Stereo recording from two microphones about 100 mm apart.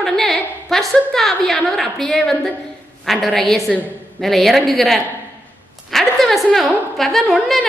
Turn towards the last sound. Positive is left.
turn(degrees=0)  # may be behind; listen again after turning